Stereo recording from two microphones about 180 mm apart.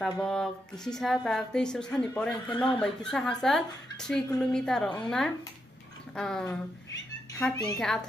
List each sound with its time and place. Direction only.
0.0 s a woman's voice: 5° left (ahead or behind)
7.5 s speech: 20° left (ahead or behind)
7.8 s a woman's voice: 5° left (ahead or behind)